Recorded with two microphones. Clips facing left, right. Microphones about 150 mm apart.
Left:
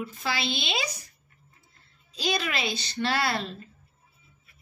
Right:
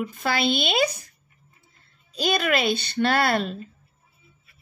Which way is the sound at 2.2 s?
55° right (ahead or behind).